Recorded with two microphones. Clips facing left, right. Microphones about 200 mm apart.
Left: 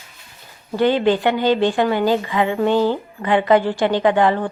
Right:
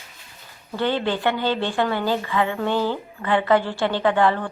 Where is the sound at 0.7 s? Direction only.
15° left (ahead or behind).